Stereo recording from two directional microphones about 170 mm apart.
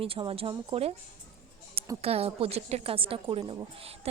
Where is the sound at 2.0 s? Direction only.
35° right (ahead or behind).